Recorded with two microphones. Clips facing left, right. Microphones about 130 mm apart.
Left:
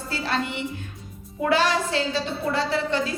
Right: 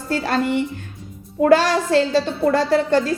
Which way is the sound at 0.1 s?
45° right (ahead or behind).